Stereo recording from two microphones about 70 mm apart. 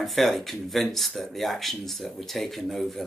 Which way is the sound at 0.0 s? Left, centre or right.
Centre.